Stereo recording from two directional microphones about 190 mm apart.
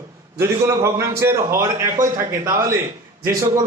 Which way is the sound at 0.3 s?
15° right (ahead or behind).